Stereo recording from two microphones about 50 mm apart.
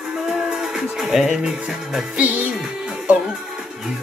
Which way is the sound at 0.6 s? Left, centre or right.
Centre.